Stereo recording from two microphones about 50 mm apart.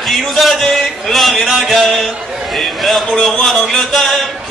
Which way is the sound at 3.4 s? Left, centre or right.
Centre.